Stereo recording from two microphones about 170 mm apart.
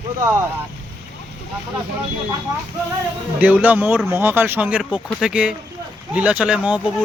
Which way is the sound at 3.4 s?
10° right (ahead or behind).